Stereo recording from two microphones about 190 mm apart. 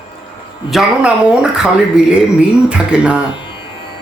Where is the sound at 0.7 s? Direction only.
5° right (ahead or behind).